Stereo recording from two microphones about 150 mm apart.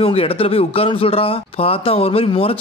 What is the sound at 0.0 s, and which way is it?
Speech, 40° left (ahead or behind).